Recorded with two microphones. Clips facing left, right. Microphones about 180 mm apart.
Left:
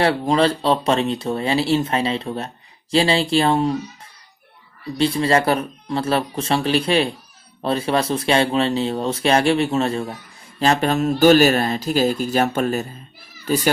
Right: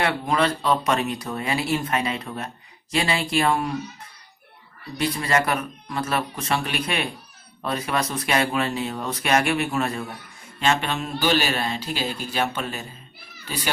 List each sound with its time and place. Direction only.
0.0 s speech: 30° left (ahead or behind)
4.9 s speech: 30° left (ahead or behind)